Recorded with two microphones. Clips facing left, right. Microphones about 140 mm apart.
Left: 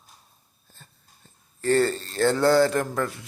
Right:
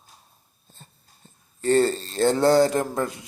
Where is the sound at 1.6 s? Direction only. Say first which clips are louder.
Right 2 dB; 20° right (ahead or behind).